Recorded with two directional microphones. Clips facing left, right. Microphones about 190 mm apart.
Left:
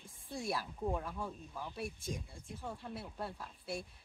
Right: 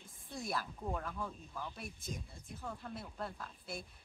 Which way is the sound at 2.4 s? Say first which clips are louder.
Even; 25° left (ahead or behind).